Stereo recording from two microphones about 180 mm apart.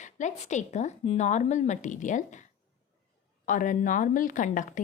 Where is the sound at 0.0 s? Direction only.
40° left (ahead or behind).